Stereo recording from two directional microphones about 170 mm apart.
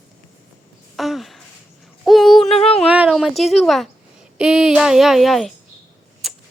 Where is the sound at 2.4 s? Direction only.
35° left (ahead or behind).